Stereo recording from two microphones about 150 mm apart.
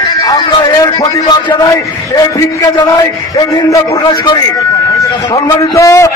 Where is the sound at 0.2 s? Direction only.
30° left (ahead or behind).